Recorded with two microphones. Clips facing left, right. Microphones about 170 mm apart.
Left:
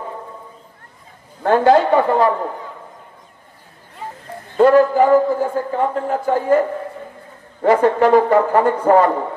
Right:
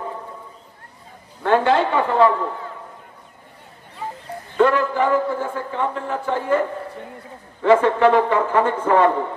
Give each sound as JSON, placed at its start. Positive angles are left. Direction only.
{"t": 1.4, "sound": "a man's voice", "side_deg": 40}
{"t": 4.6, "sound": "a man's voice", "side_deg": 40}
{"t": 7.6, "sound": "a man's voice", "side_deg": 40}